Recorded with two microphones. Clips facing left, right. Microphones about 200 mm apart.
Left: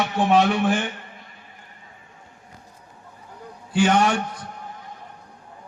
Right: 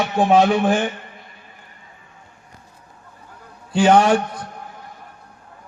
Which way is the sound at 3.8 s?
60° right (ahead or behind).